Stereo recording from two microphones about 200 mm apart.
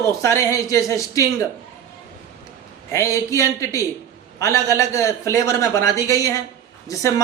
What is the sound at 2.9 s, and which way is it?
Speech, 15° left (ahead or behind).